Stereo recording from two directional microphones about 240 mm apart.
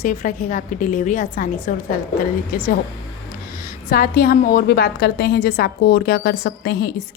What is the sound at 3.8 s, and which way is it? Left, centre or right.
A woman's voice, left.